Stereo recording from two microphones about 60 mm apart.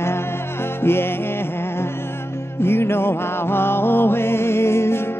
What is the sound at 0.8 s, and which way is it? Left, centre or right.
Music, left.